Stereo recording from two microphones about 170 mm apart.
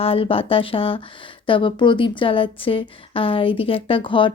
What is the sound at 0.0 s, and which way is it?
A woman's voice, 35° left (ahead or behind).